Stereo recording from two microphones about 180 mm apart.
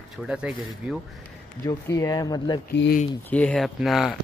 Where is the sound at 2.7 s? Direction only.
70° left (ahead or behind).